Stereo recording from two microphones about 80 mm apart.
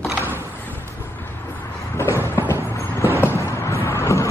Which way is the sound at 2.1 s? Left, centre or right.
Right.